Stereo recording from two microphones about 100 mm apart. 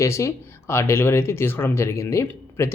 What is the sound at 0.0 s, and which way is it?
Speech, 30° left (ahead or behind).